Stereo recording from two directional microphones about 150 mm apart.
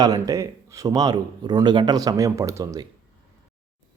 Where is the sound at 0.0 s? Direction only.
25° right (ahead or behind).